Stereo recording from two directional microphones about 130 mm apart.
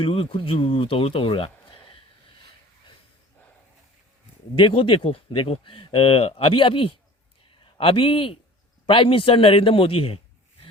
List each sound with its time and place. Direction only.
0.0 s speech: 45° left (ahead or behind)
4.5 s speech: 40° left (ahead or behind)